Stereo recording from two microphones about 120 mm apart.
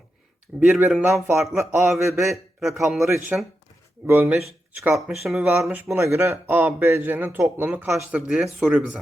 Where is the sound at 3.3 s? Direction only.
15° right (ahead or behind).